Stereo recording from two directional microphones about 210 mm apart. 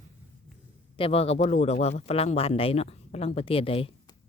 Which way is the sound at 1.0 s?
25° left (ahead or behind).